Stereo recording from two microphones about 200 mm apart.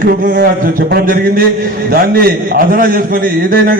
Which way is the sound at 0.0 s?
45° right (ahead or behind).